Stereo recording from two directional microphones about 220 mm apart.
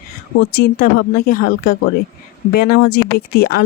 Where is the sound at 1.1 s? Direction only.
40° left (ahead or behind).